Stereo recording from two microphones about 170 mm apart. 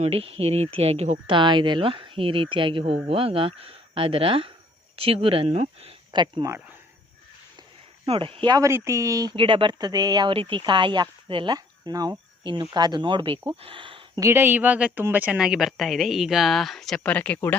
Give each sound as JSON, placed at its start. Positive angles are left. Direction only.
{"t": 0.0, "sound": "speech", "side_deg": -35}
{"t": 1.3, "sound": "speech", "side_deg": -30}
{"t": 8.0, "sound": "speech", "side_deg": -35}
{"t": 14.2, "sound": "a woman's voice", "side_deg": -15}